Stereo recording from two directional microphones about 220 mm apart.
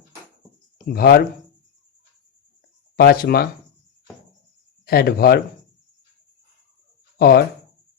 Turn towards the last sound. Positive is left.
turn(degrees=45)  # may be behind; listen again after turning